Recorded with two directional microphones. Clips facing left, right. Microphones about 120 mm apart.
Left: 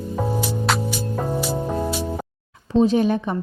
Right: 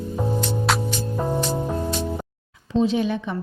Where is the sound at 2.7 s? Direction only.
45° left (ahead or behind).